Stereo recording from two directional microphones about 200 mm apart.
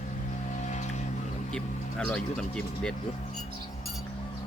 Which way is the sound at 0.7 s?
35° left (ahead or behind).